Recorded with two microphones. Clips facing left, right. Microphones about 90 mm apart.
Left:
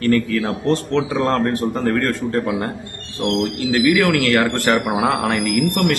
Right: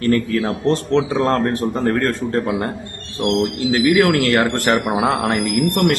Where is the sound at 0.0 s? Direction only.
30° right (ahead or behind).